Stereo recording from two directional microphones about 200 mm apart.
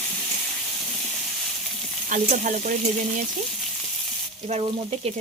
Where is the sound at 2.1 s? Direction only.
40° right (ahead or behind).